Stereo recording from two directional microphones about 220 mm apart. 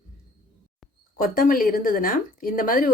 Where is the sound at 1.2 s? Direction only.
40° left (ahead or behind).